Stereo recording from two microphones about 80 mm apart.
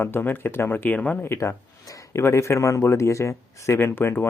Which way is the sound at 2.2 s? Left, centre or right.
Left.